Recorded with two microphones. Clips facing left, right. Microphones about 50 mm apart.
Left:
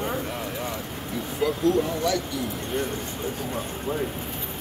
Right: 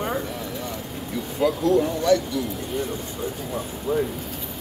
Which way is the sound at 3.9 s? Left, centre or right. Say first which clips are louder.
Right 6 dB; left.